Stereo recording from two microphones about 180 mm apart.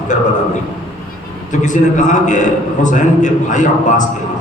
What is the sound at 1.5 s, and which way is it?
A man's voice, 45° left (ahead or behind).